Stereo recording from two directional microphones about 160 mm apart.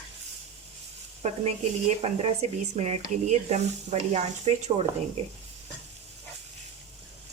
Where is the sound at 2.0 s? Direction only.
40° right (ahead or behind).